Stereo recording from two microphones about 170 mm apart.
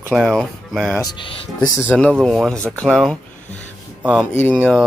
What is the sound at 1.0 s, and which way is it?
Speech, 25° left (ahead or behind).